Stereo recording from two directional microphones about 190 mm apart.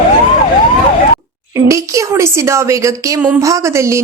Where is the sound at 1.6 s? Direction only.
15° right (ahead or behind).